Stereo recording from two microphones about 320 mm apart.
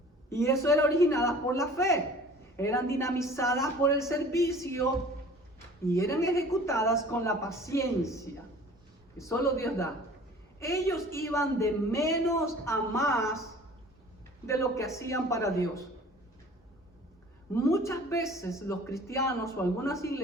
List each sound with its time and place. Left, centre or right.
0.3 s a man's voice: centre
5.9 s a man's voice: centre
14.4 s a man's voice: centre
17.5 s a man's voice: centre